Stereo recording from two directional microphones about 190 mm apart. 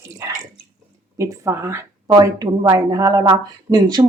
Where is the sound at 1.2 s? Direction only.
15° right (ahead or behind).